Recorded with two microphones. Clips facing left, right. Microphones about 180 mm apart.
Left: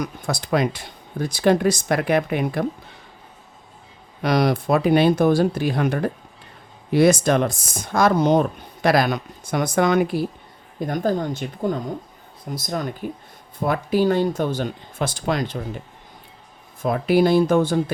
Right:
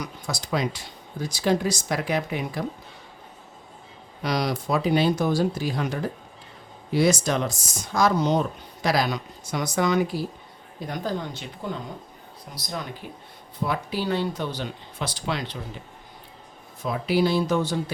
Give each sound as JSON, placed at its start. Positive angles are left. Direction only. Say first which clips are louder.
{"t": 0.0, "sound": "speech", "louder": "left 6 dB", "side_deg": 55}
{"t": 4.2, "sound": "speech", "louder": "left 7 dB", "side_deg": 55}
{"t": 16.8, "sound": "speech", "louder": "left 5 dB", "side_deg": 50}